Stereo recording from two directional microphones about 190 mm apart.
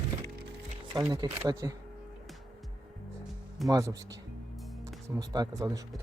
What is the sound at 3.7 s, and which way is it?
Speech, 20° right (ahead or behind).